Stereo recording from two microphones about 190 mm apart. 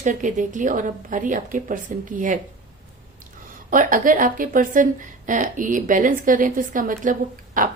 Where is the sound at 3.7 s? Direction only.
45° right (ahead or behind).